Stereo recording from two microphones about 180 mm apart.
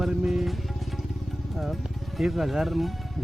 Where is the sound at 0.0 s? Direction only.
Centre (ahead or behind).